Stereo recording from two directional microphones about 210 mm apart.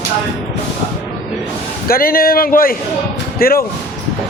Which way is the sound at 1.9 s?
45° left (ahead or behind).